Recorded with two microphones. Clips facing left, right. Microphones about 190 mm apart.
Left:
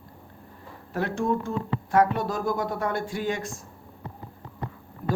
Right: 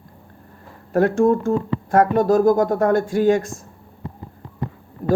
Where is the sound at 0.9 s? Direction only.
45° right (ahead or behind).